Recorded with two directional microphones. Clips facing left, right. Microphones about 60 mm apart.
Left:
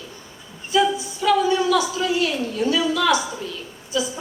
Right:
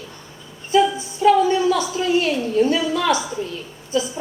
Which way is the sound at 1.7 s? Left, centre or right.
Right.